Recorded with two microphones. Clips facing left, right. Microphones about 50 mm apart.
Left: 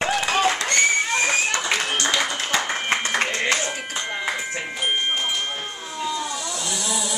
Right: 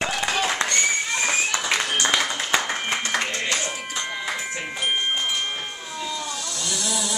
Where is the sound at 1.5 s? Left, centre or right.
Right.